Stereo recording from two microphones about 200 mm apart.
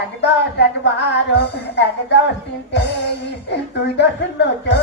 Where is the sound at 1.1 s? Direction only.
55° left (ahead or behind).